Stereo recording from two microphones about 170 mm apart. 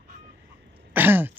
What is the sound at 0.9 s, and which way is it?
Throat clearing, 10° right (ahead or behind).